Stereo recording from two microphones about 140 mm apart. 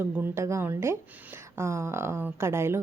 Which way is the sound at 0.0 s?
15° right (ahead or behind).